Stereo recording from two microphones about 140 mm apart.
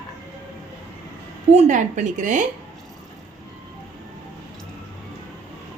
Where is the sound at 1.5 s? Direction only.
55° right (ahead or behind).